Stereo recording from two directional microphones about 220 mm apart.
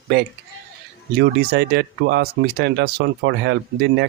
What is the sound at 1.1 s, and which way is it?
Speech, 50° right (ahead or behind).